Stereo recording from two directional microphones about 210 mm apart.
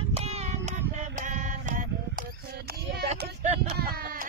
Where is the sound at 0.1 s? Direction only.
30° right (ahead or behind).